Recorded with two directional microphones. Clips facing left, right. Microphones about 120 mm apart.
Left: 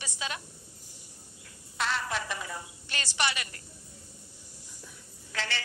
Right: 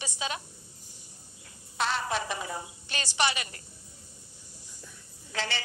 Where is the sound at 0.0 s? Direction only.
20° right (ahead or behind).